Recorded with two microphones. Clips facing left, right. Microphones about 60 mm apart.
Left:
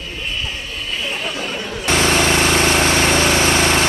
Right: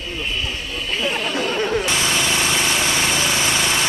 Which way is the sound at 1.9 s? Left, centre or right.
Left.